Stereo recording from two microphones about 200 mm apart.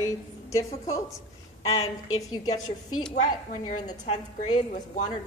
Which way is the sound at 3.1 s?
35° left (ahead or behind).